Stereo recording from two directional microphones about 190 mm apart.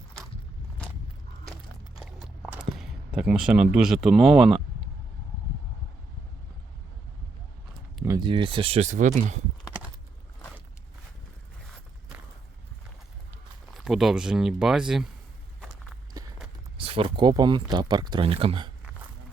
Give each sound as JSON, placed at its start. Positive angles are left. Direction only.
{"t": 2.0, "sound": "a sound", "side_deg": -5}
{"t": 8.0, "sound": "speech", "side_deg": -20}
{"t": 13.7, "sound": "speech", "side_deg": 0}
{"t": 16.1, "sound": "walk", "side_deg": -15}
{"t": 16.7, "sound": "speech", "side_deg": -30}